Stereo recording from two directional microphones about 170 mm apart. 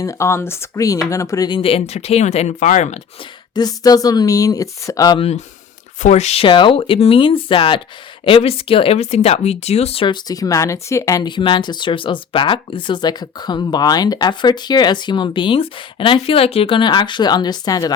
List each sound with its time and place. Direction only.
0.0 s speech: 15° left (ahead or behind); by 3.0 s 45° left (ahead or behind)
3.5 s speech: 25° left (ahead or behind)
6.0 s speech: 40° left (ahead or behind); by 17.9 s 20° left (ahead or behind)